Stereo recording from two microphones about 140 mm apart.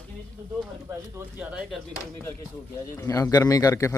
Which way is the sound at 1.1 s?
10° right (ahead or behind).